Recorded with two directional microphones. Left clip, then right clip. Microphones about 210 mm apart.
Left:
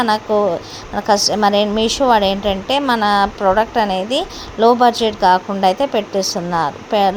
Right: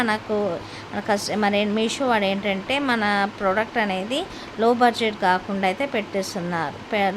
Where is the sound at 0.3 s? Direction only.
10° left (ahead or behind).